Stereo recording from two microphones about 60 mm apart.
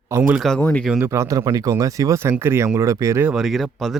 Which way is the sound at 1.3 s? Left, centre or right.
Right.